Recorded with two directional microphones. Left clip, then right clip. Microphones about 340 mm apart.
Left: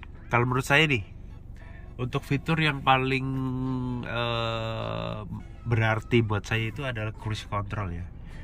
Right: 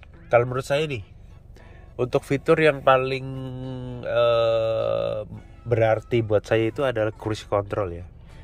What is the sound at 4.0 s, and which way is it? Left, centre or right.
Speech, centre.